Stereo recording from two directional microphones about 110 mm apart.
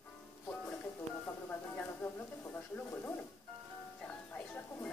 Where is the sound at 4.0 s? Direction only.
10° left (ahead or behind).